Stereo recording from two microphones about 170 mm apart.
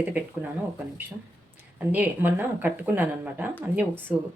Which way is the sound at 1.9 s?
10° right (ahead or behind).